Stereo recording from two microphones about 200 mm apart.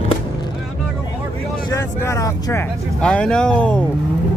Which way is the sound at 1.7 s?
15° left (ahead or behind).